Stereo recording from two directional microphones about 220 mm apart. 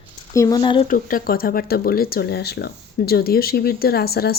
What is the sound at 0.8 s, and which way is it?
Speech, 40° left (ahead or behind).